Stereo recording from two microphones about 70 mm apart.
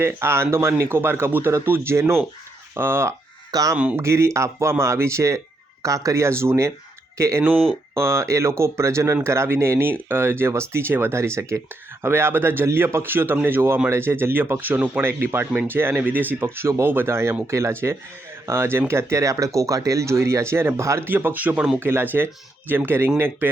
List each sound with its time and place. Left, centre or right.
0.0 s speech: right
3.5 s speech: right
3.9 s speech: right
7.5 s speech: centre
7.9 s speech: right
21.0 s speech: right